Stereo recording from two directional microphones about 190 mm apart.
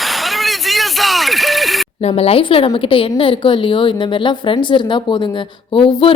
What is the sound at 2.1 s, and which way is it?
A woman's voice, 30° left (ahead or behind).